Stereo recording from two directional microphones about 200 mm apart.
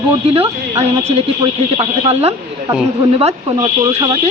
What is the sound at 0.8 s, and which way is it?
Speech, 30° right (ahead or behind).